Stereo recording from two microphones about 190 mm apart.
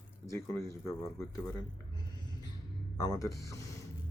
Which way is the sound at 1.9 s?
20° left (ahead or behind).